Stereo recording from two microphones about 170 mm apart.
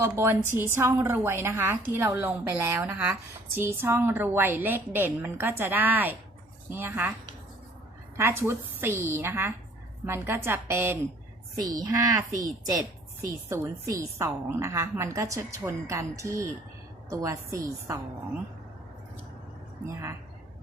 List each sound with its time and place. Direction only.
0.0 s a woman's voice: 15° right (ahead or behind)
8.1 s a woman's voice: 15° right (ahead or behind)
13.5 s a woman's voice: 15° right (ahead or behind)
19.8 s a woman's voice: 15° right (ahead or behind)